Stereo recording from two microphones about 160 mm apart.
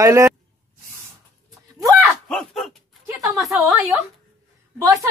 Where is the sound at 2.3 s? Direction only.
5° left (ahead or behind).